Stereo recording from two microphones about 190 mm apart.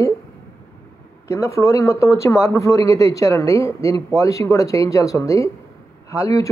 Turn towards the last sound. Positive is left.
turn(degrees=15)  # may be behind; listen again after turning